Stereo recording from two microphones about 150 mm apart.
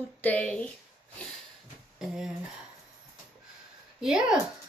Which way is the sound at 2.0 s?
5° right (ahead or behind).